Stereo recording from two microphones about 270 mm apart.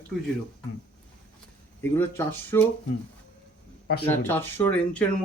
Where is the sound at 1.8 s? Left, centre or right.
Centre.